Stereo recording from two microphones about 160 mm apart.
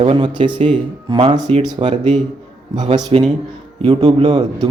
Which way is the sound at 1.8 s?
45° right (ahead or behind).